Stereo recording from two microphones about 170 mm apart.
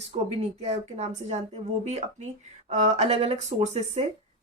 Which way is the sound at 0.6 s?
40° right (ahead or behind).